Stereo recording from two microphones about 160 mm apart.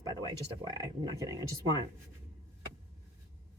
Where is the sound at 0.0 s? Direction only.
25° right (ahead or behind).